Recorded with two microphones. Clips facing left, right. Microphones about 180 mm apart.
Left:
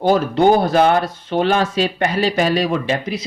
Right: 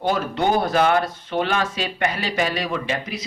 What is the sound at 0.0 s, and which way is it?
Speech, 30° left (ahead or behind).